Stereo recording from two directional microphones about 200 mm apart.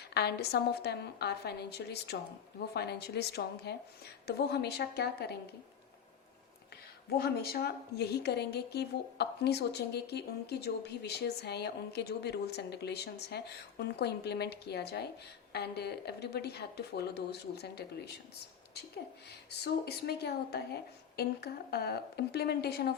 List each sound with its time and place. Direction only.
0.0 s a woman's voice: 55° left (ahead or behind)
7.2 s a woman's voice: 50° left (ahead or behind)
19.3 s a woman's voice: 55° left (ahead or behind)